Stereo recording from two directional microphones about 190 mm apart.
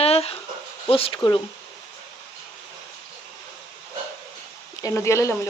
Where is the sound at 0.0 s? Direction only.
30° left (ahead or behind).